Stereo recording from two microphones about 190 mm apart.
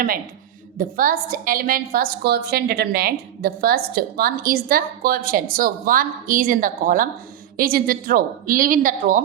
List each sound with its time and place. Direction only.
0.8 s a woman's voice: 45° right (ahead or behind)